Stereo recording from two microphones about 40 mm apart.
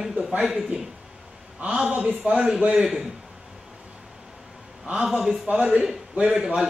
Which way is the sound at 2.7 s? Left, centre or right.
Centre.